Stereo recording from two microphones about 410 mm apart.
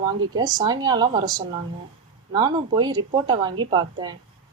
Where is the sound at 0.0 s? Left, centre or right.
Centre.